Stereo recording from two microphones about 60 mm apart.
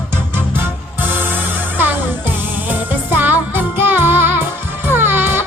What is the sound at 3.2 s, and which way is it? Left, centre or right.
Music, right.